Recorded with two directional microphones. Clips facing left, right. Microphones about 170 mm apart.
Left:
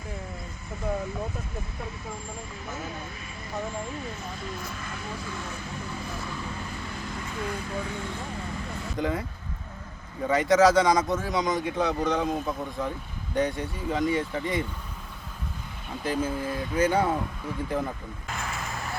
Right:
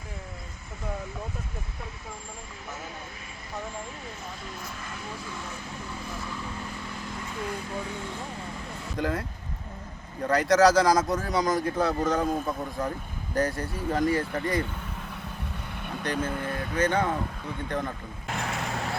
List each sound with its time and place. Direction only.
9.0 s speech: centre (ahead or behind)
16.2 s speech: 60° right (ahead or behind)
16.7 s speech: 10° left (ahead or behind)
18.4 s vehicle: 60° right (ahead or behind)